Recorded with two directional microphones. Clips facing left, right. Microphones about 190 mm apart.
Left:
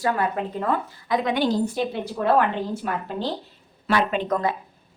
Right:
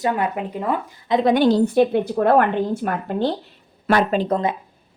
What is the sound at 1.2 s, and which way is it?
Speech, 50° right (ahead or behind).